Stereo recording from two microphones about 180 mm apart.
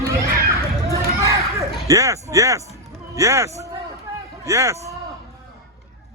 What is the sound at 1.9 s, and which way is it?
A man's voice, 15° right (ahead or behind).